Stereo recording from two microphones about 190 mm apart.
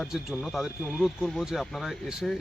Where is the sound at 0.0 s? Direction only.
Centre (ahead or behind).